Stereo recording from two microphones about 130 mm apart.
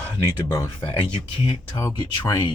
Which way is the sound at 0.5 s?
35° left (ahead or behind).